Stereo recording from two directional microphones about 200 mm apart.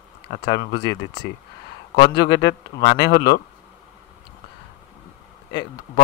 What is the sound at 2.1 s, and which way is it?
Speech, 60° left (ahead or behind).